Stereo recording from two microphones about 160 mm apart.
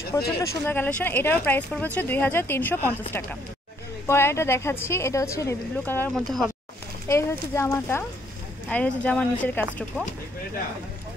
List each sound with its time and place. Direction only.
0.1 s speech: 15° left (ahead or behind)
6.1 s speech: centre (ahead or behind)
7.1 s speech: 15° left (ahead or behind)